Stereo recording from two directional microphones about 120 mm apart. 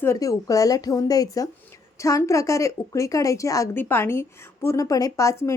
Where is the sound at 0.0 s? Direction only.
25° left (ahead or behind).